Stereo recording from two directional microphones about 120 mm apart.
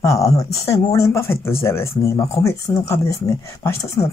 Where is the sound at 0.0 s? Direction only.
25° left (ahead or behind).